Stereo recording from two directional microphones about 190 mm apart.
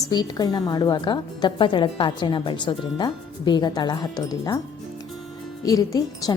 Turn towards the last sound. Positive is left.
turn(degrees=20)  # may be behind; listen again after turning